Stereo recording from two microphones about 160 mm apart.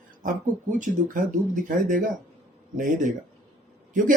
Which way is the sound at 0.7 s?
55° right (ahead or behind).